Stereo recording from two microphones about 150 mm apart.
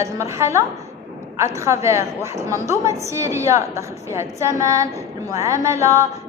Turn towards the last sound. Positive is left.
turn(degrees=-20)  # may be behind; listen again after turning